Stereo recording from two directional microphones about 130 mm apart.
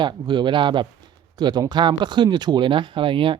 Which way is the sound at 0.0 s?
35° right (ahead or behind).